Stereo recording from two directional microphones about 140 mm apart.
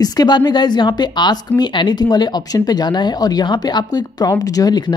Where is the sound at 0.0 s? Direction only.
30° left (ahead or behind).